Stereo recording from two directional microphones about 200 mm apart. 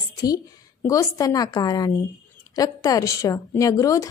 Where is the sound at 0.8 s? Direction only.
15° left (ahead or behind).